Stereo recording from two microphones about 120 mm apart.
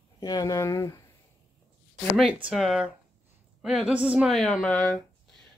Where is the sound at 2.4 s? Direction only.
5° right (ahead or behind).